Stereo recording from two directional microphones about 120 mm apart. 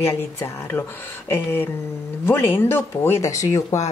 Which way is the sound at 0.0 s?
20° left (ahead or behind).